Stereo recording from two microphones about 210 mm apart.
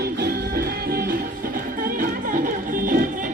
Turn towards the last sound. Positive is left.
turn(degrees=-40)  # may be behind; listen again after turning